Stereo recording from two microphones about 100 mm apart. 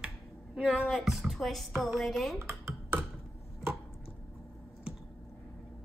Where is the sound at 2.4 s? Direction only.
20° right (ahead or behind).